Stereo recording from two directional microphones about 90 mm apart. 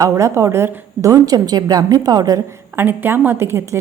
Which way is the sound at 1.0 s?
40° right (ahead or behind).